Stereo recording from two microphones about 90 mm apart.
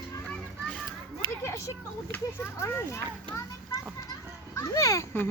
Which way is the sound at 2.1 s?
25° left (ahead or behind).